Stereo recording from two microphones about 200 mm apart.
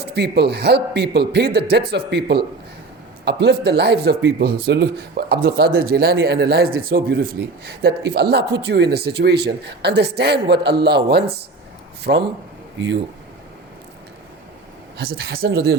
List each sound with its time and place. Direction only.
0.1 s a man's voice: 55° right (ahead or behind)
12.1 s speech: 45° right (ahead or behind)
14.9 s speech: 50° right (ahead or behind)